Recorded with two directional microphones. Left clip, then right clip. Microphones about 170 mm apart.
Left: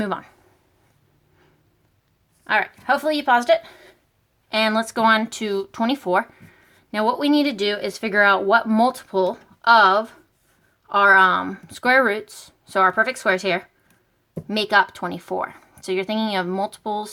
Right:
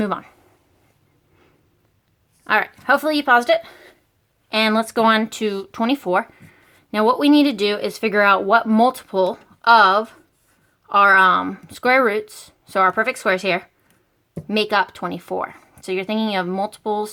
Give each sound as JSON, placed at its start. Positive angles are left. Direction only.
{"t": 0.0, "sound": "speech", "side_deg": -20}
{"t": 2.4, "sound": "speech", "side_deg": -35}